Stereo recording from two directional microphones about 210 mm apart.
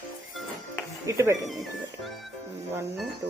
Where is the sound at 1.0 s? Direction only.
15° right (ahead or behind).